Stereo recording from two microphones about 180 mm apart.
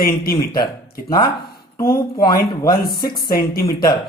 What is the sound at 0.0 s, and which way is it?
Speech, 55° left (ahead or behind).